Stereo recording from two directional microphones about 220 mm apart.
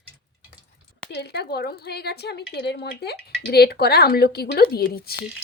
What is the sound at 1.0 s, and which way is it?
Speech, 50° left (ahead or behind).